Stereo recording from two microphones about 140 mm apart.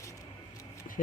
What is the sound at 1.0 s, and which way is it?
Speech, 70° left (ahead or behind).